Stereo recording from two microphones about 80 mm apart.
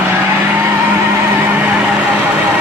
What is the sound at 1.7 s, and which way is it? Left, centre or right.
Vehicle, centre.